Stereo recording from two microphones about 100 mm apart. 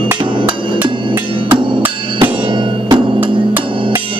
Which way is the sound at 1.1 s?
55° right (ahead or behind).